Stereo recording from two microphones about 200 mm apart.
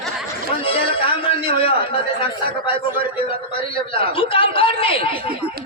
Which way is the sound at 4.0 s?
25° left (ahead or behind).